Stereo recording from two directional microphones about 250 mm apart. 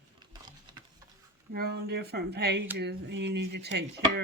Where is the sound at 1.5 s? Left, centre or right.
Right.